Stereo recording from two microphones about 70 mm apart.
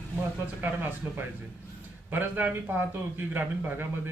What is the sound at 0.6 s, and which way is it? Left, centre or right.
Speech, right.